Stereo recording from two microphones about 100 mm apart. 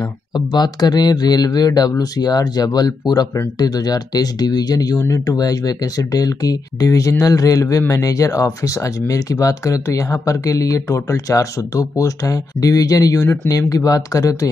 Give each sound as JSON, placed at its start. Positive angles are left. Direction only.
{"t": 0.5, "sound": "speech", "side_deg": 45}